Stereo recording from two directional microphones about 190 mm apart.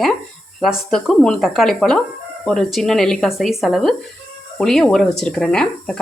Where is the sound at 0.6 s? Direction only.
Centre (ahead or behind).